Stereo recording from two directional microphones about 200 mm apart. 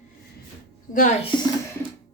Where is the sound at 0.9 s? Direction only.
40° left (ahead or behind).